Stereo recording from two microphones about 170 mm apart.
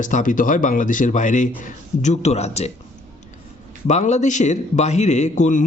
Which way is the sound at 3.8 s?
45° left (ahead or behind).